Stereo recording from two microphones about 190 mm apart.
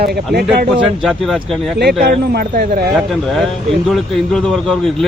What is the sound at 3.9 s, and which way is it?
Speech, centre (ahead or behind).